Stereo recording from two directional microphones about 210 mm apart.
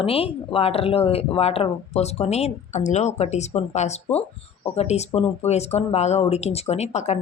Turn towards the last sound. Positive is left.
turn(degrees=30)  # may be behind; listen again after turning